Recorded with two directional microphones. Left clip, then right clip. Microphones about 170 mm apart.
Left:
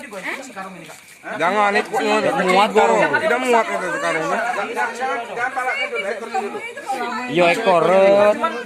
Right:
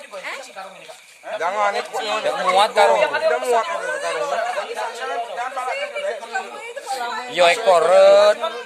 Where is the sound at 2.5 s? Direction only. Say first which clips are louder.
Even; centre (ahead or behind).